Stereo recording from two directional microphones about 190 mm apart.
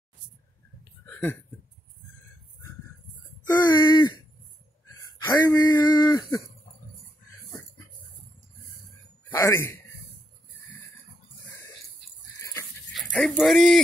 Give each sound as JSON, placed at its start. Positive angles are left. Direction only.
{"t": 1.0, "sound": "a sound", "side_deg": 10}
{"t": 3.4, "sound": "speech", "side_deg": 20}
{"t": 5.2, "sound": "speech", "side_deg": 20}
{"t": 9.3, "sound": "a man's voice", "side_deg": 15}
{"t": 12.9, "sound": "speech", "side_deg": 0}